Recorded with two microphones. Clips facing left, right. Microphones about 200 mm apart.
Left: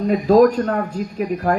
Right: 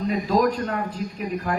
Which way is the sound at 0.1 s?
45° left (ahead or behind).